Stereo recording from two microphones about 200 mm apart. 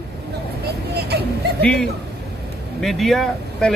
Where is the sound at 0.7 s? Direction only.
55° right (ahead or behind).